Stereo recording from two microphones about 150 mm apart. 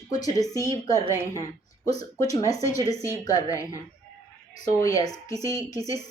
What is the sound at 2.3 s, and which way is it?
Speech, 25° left (ahead or behind).